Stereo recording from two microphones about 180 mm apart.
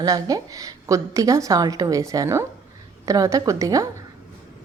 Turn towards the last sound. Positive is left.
turn(degrees=-20)  # may be behind; listen again after turning